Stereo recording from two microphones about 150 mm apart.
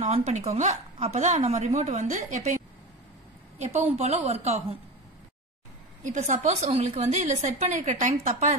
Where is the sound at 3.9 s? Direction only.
45° right (ahead or behind).